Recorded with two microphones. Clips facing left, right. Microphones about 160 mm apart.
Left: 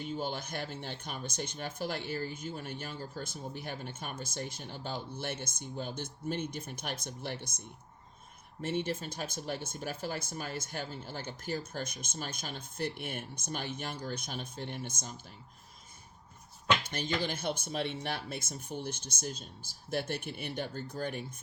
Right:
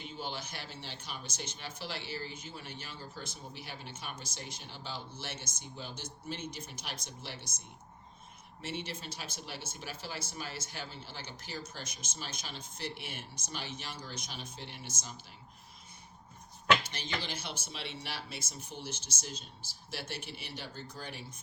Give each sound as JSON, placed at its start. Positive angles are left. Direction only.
{"t": 0.0, "sound": "speech", "side_deg": 45}
{"t": 8.6, "sound": "speech", "side_deg": 50}
{"t": 16.9, "sound": "speech", "side_deg": 50}